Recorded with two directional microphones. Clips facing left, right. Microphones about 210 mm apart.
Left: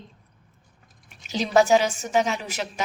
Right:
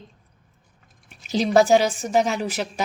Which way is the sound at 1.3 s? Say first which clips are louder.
Right 2 dB; 35° right (ahead or behind).